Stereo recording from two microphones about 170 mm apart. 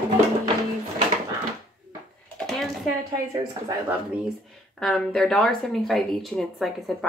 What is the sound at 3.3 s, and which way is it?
Speech, 20° right (ahead or behind).